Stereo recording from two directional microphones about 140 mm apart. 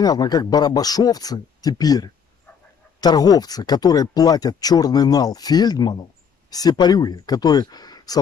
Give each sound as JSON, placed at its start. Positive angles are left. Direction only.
{"t": 0.0, "sound": "speech", "side_deg": 30}